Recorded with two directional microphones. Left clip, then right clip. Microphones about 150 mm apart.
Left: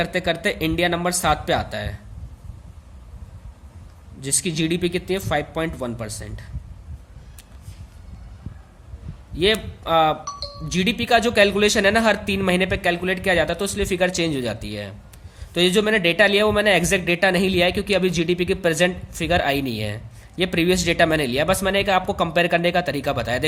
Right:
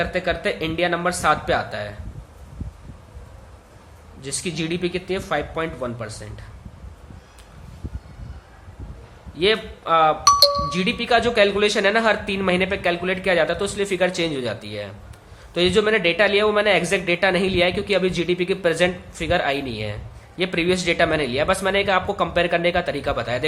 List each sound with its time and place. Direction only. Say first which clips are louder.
0.0 s speech: even; 55° left (ahead or behind)
4.2 s speech: left 3 dB; 55° left (ahead or behind)
9.3 s speech: even; 50° left (ahead or behind)